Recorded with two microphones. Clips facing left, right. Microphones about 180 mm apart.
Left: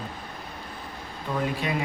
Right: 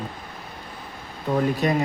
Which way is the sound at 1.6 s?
45° right (ahead or behind).